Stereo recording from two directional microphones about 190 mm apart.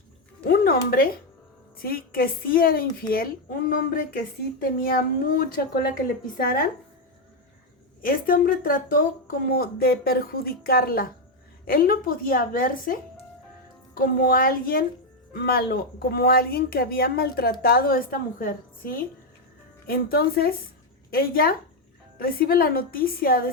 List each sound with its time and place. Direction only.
0.4 s a woman's voice: 55° left (ahead or behind)
8.0 s a woman's voice: 50° left (ahead or behind)